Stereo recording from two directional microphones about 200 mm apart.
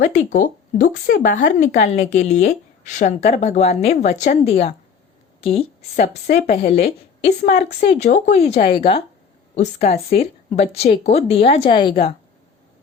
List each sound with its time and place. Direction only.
0.0 s speech: 40° left (ahead or behind); by 12.1 s 25° left (ahead or behind)